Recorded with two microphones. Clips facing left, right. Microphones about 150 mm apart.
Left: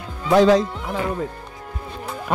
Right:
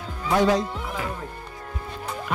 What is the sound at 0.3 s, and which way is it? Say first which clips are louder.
Speech: left 6 dB; 90° left.